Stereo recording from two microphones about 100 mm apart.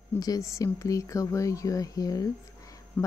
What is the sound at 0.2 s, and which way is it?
Speech, 35° left (ahead or behind).